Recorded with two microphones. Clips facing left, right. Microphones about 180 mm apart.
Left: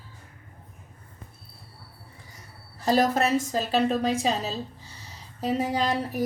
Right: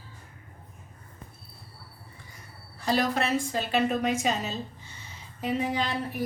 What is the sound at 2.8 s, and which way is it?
A woman's voice, 40° left (ahead or behind).